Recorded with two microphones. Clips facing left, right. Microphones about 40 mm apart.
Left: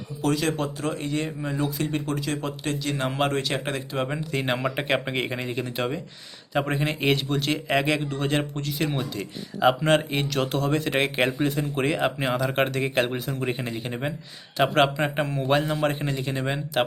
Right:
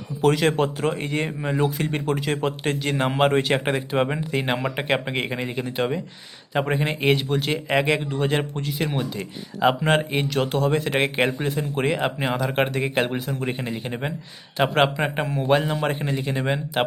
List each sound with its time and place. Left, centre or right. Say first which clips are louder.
0.2 s speech: right 5 dB; right
4.4 s speech: even; centre